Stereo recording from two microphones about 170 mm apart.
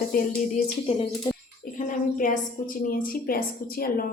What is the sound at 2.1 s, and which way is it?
A woman's voice, 50° left (ahead or behind).